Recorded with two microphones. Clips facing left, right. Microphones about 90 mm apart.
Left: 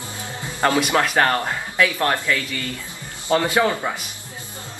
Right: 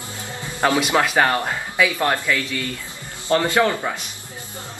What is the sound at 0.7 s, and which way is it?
A man's voice, centre (ahead or behind).